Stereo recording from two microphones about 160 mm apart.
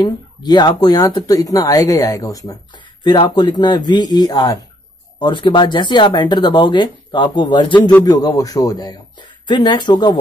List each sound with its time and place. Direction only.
0.0 s speech: 25° left (ahead or behind)